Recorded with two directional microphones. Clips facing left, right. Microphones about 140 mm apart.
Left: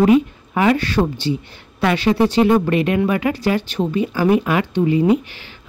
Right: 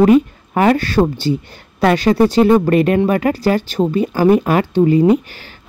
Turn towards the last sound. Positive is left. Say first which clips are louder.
# right 4 dB
turn(degrees=-40)  # may be behind; listen again after turning